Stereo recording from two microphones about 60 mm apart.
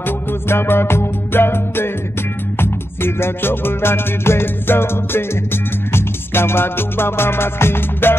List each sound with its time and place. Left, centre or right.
0.0 s music: left